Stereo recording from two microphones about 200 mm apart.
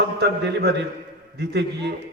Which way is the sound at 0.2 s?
55° right (ahead or behind).